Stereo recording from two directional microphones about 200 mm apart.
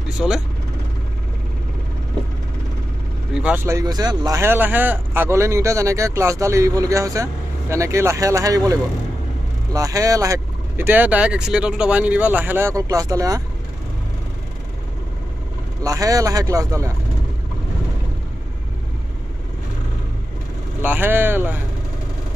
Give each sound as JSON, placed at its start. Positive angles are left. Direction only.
{"t": 0.2, "sound": "speech", "side_deg": 5}
{"t": 3.3, "sound": "speech", "side_deg": -10}
{"t": 15.8, "sound": "speech", "side_deg": -15}
{"t": 20.8, "sound": "speech", "side_deg": -10}